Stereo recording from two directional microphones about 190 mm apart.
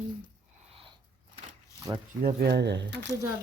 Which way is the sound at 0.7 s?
30° right (ahead or behind).